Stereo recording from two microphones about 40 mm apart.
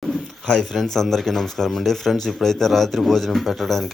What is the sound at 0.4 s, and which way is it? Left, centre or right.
Speech, centre.